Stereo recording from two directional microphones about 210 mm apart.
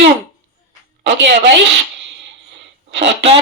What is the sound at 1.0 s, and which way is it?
Speech, 55° right (ahead or behind).